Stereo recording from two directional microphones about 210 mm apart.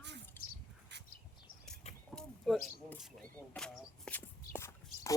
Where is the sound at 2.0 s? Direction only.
Centre (ahead or behind).